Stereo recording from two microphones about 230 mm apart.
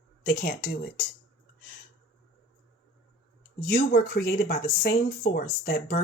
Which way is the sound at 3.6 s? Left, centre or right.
Left.